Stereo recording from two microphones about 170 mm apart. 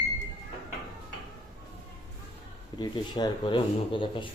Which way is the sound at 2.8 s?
25° left (ahead or behind).